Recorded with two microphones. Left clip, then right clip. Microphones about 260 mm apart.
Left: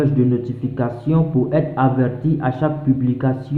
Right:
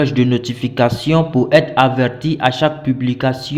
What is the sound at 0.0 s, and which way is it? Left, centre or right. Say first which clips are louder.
A man's voice: right 3 dB; right.